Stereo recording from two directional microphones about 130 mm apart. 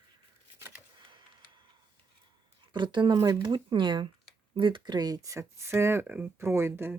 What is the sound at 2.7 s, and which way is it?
Speech, 35° right (ahead or behind).